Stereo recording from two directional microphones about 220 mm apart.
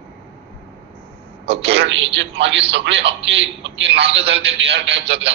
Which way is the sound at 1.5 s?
25° right (ahead or behind).